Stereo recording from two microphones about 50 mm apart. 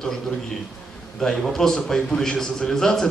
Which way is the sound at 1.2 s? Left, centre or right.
Centre.